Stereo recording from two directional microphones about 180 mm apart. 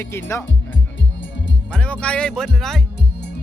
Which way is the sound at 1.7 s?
5° left (ahead or behind).